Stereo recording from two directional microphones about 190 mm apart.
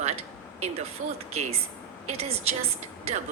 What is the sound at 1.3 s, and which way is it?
A woman's voice, 35° right (ahead or behind).